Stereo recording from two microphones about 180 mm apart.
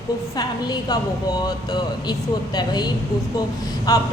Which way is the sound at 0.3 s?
20° left (ahead or behind).